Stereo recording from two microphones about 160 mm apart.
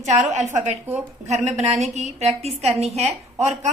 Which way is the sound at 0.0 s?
45° right (ahead or behind).